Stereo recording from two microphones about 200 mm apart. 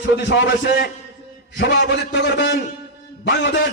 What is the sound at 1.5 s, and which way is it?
A man's voice, 55° left (ahead or behind).